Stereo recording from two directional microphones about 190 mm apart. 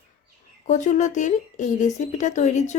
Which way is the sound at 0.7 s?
40° left (ahead or behind).